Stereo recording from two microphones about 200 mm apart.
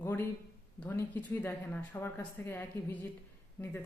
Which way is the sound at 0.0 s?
10° left (ahead or behind).